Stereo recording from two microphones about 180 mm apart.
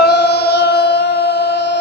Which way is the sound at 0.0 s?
70° left (ahead or behind).